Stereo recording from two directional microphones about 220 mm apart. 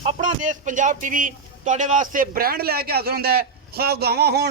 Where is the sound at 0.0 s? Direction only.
30° right (ahead or behind).